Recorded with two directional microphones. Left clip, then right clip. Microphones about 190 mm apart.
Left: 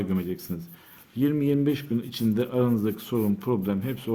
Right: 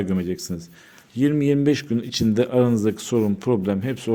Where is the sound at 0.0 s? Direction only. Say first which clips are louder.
Right 5 dB; 25° right (ahead or behind).